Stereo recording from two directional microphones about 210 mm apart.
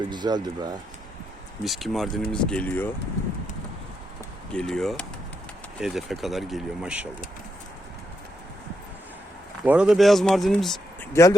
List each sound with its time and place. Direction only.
0.1 s speech: 20° right (ahead or behind)
1.6 s speech: centre (ahead or behind)
4.5 s speech: 5° left (ahead or behind)
9.6 s speech: 5° right (ahead or behind)
11.1 s speech: 15° left (ahead or behind)